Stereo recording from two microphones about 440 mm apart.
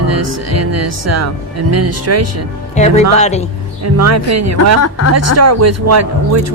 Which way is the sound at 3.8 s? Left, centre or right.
Right.